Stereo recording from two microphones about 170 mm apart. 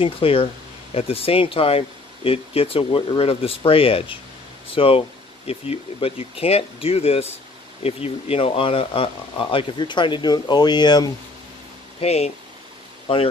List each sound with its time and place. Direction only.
0.0 s speech: 35° left (ahead or behind)
12.0 s speech: 40° left (ahead or behind)